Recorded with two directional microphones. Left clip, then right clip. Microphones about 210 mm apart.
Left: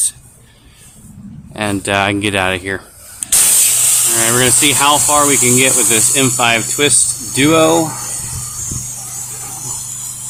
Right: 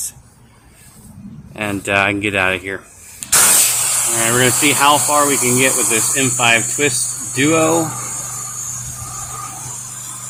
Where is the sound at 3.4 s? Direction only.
40° left (ahead or behind).